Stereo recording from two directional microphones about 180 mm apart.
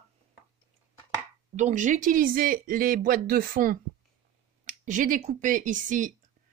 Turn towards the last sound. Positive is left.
turn(degrees=-45)  # may be behind; listen again after turning